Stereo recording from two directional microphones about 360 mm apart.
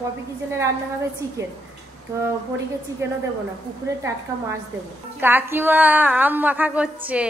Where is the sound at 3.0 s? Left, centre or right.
Centre.